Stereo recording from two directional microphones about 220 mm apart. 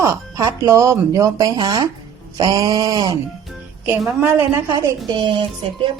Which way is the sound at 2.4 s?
20° right (ahead or behind).